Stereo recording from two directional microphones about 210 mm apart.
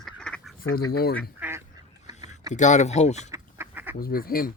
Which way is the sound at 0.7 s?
45° left (ahead or behind).